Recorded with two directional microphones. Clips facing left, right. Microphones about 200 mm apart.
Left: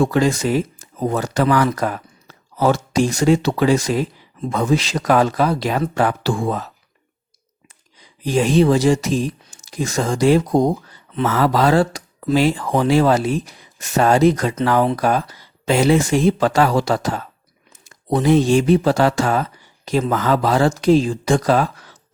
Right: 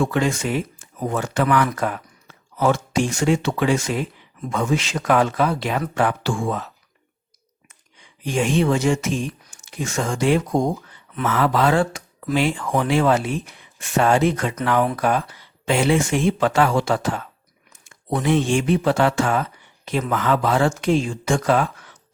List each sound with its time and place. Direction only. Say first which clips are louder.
0.0 s speech: left 4 dB; 35° left (ahead or behind)
7.9 s speech: left 4 dB; 35° left (ahead or behind)